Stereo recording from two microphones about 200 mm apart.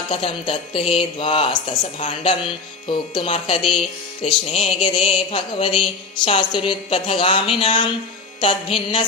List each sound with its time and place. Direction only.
0.1 s speech: 25° left (ahead or behind)